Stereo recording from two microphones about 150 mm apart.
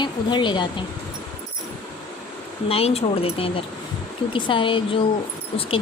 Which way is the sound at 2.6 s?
40° left (ahead or behind).